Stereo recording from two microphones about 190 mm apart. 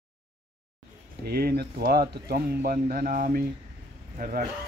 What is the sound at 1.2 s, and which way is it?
Speech, 55° right (ahead or behind).